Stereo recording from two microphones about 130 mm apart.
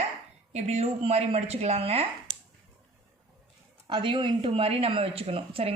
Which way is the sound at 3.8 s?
40° right (ahead or behind).